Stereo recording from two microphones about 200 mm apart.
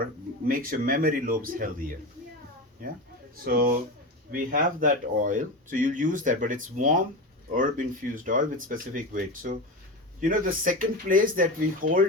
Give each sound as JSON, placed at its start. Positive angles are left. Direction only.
{"t": 0.0, "sound": "speech", "side_deg": -45}
{"t": 3.4, "sound": "speech", "side_deg": -45}
{"t": 8.1, "sound": "speech", "side_deg": -40}